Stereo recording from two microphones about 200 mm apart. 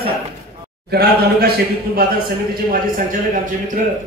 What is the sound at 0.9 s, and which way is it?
A man's voice, 50° right (ahead or behind).